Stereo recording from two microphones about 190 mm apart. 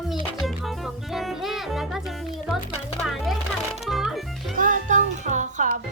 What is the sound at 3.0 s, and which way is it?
Music, centre (ahead or behind).